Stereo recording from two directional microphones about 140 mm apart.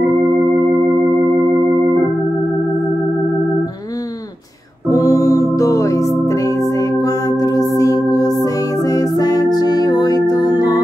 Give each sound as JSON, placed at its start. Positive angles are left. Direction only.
{"t": 4.9, "sound": "music", "side_deg": 25}